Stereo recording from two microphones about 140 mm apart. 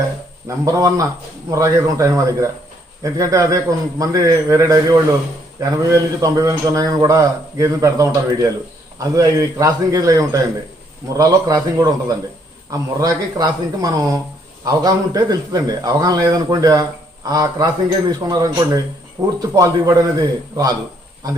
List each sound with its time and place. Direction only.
0.4 s a man's voice: 25° right (ahead or behind)